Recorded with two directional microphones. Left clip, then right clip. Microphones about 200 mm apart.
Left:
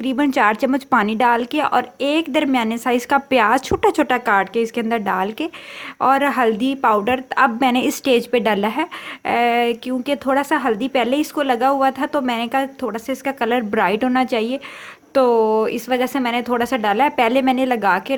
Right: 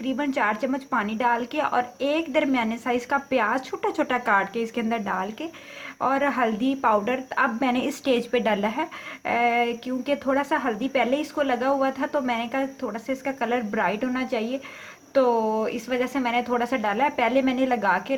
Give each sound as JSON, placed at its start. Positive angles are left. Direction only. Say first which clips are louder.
{"t": 0.0, "sound": "a woman's voice", "louder": "left 8 dB", "side_deg": 50}